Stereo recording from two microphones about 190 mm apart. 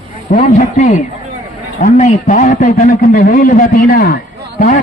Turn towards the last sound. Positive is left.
turn(degrees=45)  # may be behind; listen again after turning